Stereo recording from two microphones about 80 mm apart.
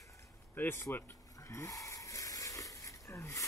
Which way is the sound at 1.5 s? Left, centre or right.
Left.